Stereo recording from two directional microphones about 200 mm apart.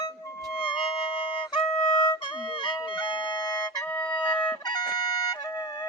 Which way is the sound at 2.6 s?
25° left (ahead or behind).